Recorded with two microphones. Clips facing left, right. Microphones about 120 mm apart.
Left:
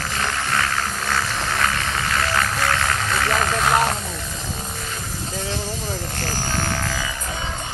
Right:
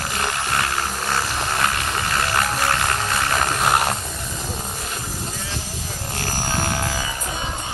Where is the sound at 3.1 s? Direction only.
10° right (ahead or behind).